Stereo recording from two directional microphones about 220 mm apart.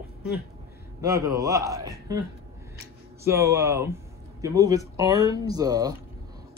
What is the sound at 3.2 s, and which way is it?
A man's voice, 10° right (ahead or behind).